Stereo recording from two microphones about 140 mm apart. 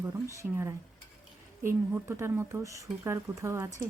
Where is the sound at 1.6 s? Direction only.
20° right (ahead or behind).